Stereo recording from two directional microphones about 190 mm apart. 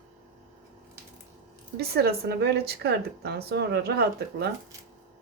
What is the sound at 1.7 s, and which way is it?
A woman's voice, 55° right (ahead or behind).